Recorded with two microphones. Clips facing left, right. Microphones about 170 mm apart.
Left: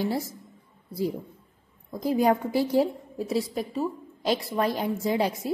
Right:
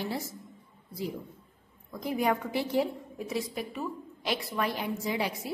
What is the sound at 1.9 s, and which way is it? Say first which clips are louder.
A woman's voice: left 6 dB; 35° left (ahead or behind).